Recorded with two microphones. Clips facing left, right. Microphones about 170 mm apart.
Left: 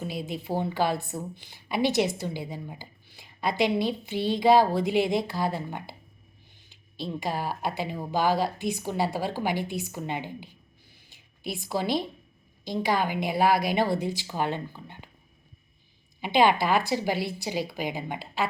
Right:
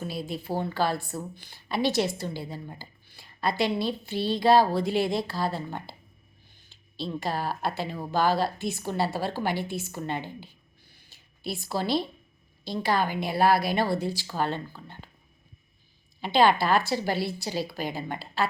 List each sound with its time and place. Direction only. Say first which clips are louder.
0.0 s a woman's voice: even; 15° left (ahead or behind)
7.0 s a woman's voice: even; 15° left (ahead or behind)
16.2 s a woman's voice: even; 15° left (ahead or behind)